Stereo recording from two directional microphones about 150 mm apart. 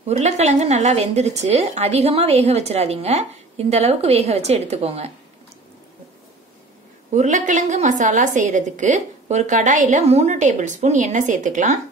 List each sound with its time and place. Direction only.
0.0 s speech: 45° right (ahead or behind)
7.1 s a woman's voice: 55° right (ahead or behind)